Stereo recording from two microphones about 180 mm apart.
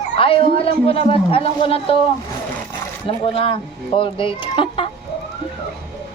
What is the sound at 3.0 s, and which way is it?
Speech, 30° left (ahead or behind).